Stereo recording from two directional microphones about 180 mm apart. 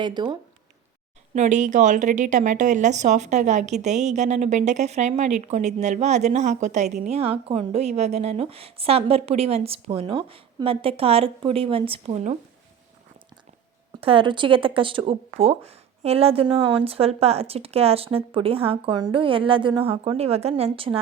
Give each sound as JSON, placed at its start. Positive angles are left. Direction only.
{"t": 0.0, "sound": "speech", "side_deg": -25}
{"t": 1.3, "sound": "speech", "side_deg": -40}
{"t": 14.0, "sound": "speech", "side_deg": -30}